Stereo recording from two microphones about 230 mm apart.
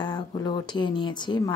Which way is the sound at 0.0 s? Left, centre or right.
Centre.